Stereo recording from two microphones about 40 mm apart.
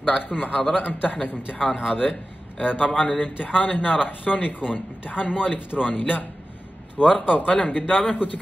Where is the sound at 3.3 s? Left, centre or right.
Centre.